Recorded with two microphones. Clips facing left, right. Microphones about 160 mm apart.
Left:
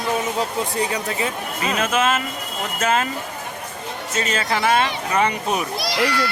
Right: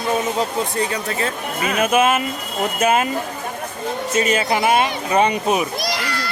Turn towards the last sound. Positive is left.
turn(degrees=-45)  # may be behind; listen again after turning